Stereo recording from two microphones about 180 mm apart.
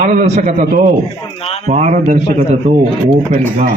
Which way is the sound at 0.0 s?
40° right (ahead or behind).